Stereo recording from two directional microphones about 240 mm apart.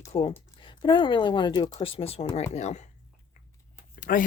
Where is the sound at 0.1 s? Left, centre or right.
Left.